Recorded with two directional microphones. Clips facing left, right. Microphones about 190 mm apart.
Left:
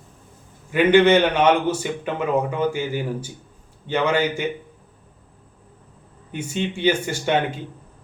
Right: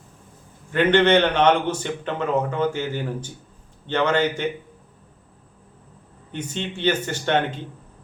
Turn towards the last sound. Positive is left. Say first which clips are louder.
# left 1 dB
turn(degrees=10)  # may be behind; listen again after turning